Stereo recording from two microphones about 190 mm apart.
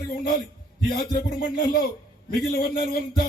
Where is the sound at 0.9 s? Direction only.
50° left (ahead or behind).